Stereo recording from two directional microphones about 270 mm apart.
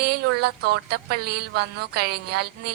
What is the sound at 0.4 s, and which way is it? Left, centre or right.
A woman's voice, right.